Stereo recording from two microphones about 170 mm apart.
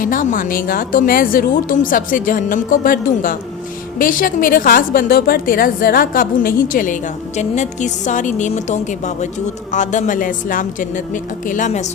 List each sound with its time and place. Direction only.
0.0 s a woman's voice: 55° left (ahead or behind)